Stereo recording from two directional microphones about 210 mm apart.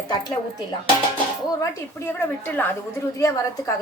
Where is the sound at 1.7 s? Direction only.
10° left (ahead or behind).